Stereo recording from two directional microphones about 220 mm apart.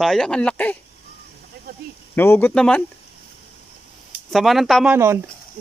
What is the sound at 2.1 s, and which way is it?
Speech, 10° left (ahead or behind).